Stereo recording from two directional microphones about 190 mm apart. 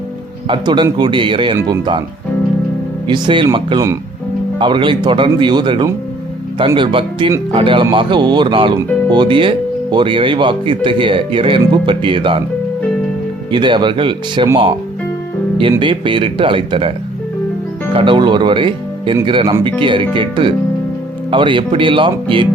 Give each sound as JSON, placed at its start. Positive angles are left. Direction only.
{"t": 0.4, "sound": "speech", "side_deg": -25}
{"t": 3.1, "sound": "speech", "side_deg": -25}
{"t": 13.5, "sound": "speech", "side_deg": -25}
{"t": 15.8, "sound": "speech", "side_deg": -25}
{"t": 17.9, "sound": "speech", "side_deg": -25}